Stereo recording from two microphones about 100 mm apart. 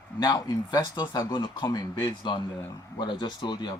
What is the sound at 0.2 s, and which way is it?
Speech, 45° left (ahead or behind).